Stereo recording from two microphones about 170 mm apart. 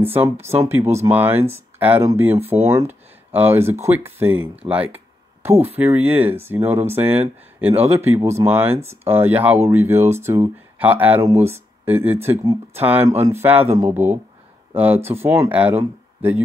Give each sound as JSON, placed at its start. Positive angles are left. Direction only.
{"t": 0.7, "sound": "speech", "side_deg": -15}